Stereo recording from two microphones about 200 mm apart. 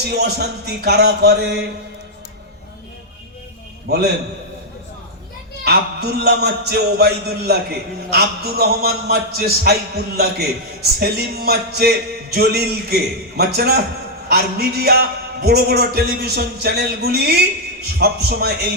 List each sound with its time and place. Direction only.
0.1 s speech: 55° right (ahead or behind)
3.8 s a man's voice: 55° right (ahead or behind)
5.6 s a man's voice: 55° right (ahead or behind)